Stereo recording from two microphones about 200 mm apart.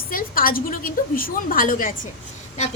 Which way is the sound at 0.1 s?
45° left (ahead or behind).